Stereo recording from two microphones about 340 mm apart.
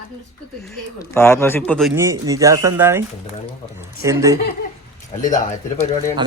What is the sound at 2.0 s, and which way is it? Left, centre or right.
Speech, centre.